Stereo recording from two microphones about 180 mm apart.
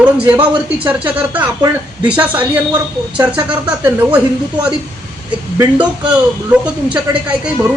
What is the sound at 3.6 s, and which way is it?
Speech, 10° right (ahead or behind).